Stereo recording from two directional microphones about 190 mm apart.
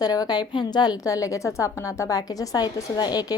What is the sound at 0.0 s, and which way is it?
A woman's voice, 20° left (ahead or behind).